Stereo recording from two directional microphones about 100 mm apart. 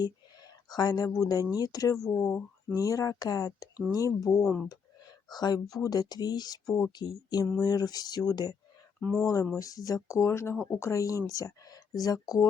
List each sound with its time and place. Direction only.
0.7 s speech: 40° left (ahead or behind)
9.0 s speech: 5° left (ahead or behind)
9.2 s speech: 35° left (ahead or behind)